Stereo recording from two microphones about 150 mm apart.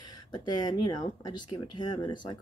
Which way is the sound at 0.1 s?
30° left (ahead or behind).